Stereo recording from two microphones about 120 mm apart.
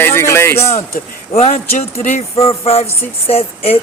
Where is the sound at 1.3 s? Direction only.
60° left (ahead or behind); by 2.2 s 75° left (ahead or behind).